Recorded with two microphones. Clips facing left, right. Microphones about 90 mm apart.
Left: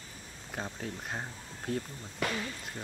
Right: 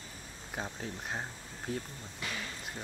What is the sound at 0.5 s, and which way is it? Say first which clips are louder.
Speech: left 1 dB; centre (ahead or behind).